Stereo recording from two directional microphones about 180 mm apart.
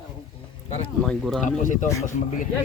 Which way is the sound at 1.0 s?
Centre (ahead or behind).